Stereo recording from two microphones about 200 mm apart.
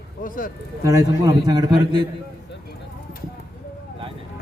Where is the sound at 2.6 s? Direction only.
50° left (ahead or behind).